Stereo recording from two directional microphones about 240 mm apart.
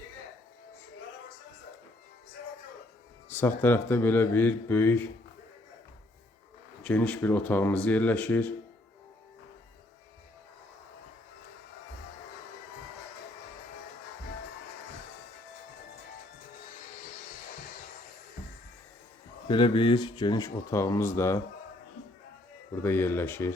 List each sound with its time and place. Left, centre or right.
3.2 s speech: centre
6.8 s speech: centre
19.5 s speech: centre
22.8 s speech: centre